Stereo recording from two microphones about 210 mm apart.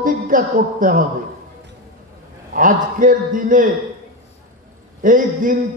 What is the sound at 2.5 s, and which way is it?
A man's voice, 40° right (ahead or behind).